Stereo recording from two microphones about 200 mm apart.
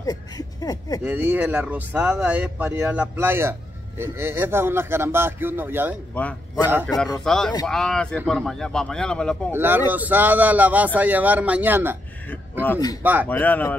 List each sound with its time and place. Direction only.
0.0 s speech: 20° left (ahead or behind)
1.0 s speech: 10° right (ahead or behind)
6.1 s a man's voice: 5° left (ahead or behind)
9.5 s speech: 10° right (ahead or behind)
12.6 s speech: 15° left (ahead or behind)
13.0 s speech: 10° right (ahead or behind)
13.3 s speech: 10° left (ahead or behind)